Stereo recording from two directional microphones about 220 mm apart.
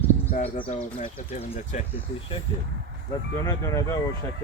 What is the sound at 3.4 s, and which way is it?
Speech, 15° left (ahead or behind).